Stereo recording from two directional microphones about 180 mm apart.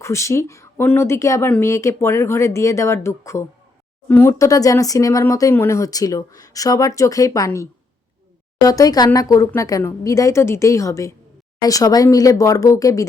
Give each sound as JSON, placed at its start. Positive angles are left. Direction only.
{"t": 0.0, "sound": "speech", "side_deg": 15}